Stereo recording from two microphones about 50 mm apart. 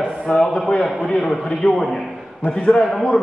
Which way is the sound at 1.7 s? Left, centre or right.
Centre.